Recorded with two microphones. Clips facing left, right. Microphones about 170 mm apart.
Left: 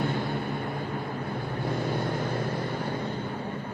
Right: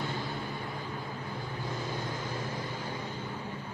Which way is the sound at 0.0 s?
60° left (ahead or behind).